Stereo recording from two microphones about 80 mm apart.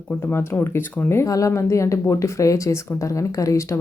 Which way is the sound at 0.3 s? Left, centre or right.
Left.